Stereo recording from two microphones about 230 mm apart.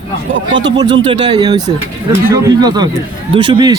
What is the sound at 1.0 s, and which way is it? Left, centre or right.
A man's voice, right.